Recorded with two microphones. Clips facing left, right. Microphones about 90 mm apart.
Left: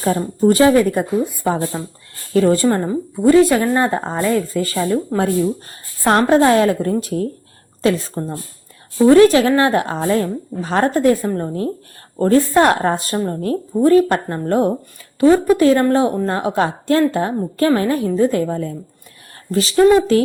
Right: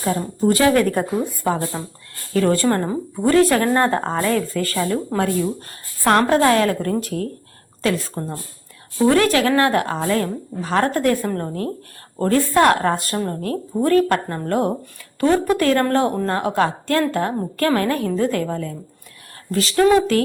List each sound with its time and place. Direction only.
0.0 s speech: 45° left (ahead or behind)
0.7 s a woman's voice: 10° left (ahead or behind)
6.1 s a woman's voice: 25° left (ahead or behind)